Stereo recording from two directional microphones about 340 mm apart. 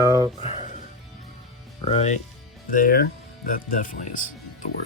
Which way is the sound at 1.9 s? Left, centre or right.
Centre.